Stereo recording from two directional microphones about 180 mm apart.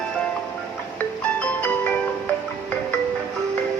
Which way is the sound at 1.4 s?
5° left (ahead or behind).